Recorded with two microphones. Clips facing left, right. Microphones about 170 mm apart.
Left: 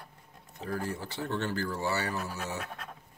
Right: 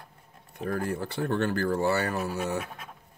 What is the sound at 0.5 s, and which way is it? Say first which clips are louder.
Speech: right 5 dB; 55° right (ahead or behind).